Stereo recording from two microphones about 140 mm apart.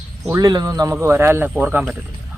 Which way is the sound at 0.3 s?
25° right (ahead or behind).